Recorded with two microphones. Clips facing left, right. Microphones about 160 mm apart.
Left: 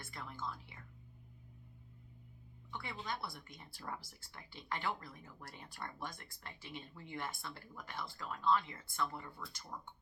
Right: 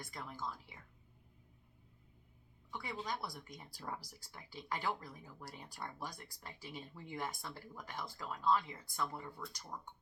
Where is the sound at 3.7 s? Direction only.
15° right (ahead or behind).